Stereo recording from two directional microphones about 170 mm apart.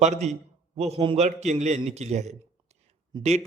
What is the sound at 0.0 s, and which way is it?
A man's voice, 40° right (ahead or behind).